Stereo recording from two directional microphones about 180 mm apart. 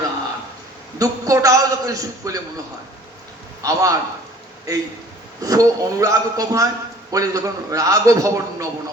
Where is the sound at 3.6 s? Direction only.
20° right (ahead or behind).